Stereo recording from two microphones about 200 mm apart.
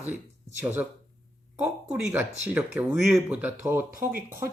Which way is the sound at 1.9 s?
5° right (ahead or behind).